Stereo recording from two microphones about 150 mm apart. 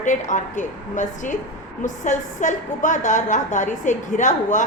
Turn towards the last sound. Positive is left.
turn(degrees=55)  # may be behind; listen again after turning